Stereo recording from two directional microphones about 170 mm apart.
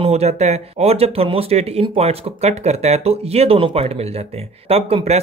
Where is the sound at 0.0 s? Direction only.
40° right (ahead or behind).